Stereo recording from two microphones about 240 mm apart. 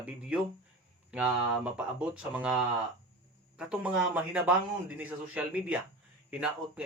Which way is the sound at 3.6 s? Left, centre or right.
Centre.